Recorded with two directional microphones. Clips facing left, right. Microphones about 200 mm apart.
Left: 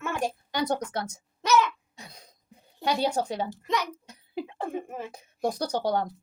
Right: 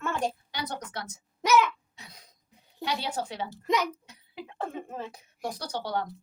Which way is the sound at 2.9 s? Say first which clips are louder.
Left 6 dB; 45° left (ahead or behind).